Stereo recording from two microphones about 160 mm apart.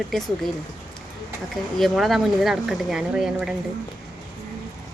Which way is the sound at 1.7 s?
Centre (ahead or behind).